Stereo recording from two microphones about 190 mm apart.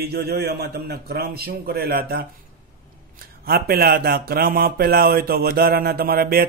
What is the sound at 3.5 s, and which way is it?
Speech, 55° right (ahead or behind).